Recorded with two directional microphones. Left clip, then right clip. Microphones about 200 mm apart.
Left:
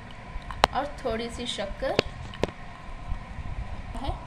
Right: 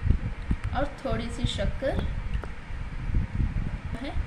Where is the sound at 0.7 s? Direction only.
25° left (ahead or behind).